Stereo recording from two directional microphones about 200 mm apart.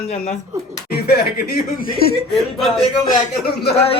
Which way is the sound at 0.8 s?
55° left (ahead or behind).